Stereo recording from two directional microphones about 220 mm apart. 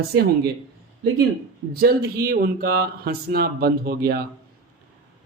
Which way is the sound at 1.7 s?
45° right (ahead or behind).